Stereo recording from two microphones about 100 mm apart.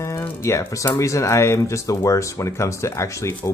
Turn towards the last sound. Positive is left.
turn(degrees=30)  # may be behind; listen again after turning